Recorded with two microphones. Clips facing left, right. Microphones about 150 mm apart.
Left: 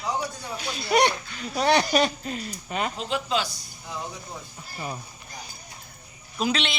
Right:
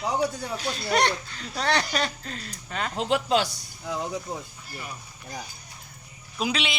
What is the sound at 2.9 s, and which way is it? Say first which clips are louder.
Speech: right 9 dB; 75° right (ahead or behind).